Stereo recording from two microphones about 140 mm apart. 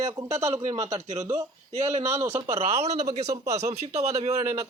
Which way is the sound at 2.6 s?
45° right (ahead or behind).